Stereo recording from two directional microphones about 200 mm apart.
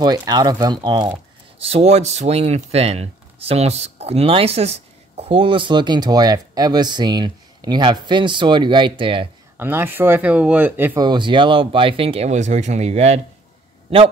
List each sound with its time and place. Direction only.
0.0 s speech: 20° right (ahead or behind)
9.6 s speech: 10° right (ahead or behind)
11.1 s speech: 25° right (ahead or behind)